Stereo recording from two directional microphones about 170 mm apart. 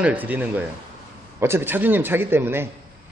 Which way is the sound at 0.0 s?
10° right (ahead or behind).